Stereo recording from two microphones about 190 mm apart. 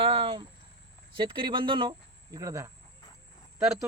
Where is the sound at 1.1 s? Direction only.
25° right (ahead or behind).